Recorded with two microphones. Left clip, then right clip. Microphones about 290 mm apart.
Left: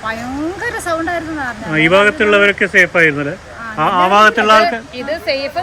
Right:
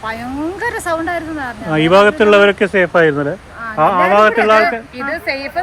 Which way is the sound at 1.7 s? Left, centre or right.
Centre.